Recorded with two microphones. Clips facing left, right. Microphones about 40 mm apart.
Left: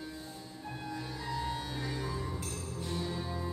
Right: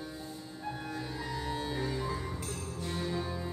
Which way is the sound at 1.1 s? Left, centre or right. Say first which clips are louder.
Left 2 dB; centre.